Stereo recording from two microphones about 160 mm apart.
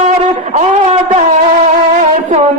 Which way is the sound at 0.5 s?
45° right (ahead or behind).